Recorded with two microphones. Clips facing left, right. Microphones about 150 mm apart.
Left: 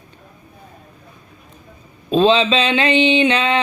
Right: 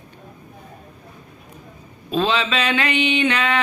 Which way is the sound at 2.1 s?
25° left (ahead or behind).